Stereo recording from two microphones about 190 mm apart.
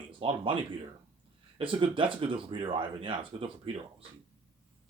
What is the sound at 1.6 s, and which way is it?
Speech, 25° right (ahead or behind).